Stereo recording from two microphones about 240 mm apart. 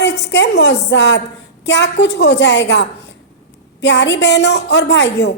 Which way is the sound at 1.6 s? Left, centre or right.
Left.